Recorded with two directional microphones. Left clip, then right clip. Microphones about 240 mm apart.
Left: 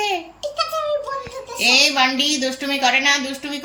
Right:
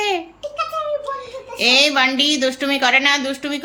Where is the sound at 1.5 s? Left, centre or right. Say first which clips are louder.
Right 1 dB; centre.